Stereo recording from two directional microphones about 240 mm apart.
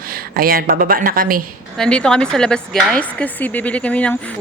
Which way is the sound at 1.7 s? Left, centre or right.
Centre.